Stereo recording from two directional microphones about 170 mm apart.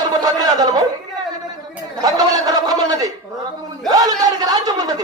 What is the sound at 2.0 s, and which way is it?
A man's voice, 20° right (ahead or behind).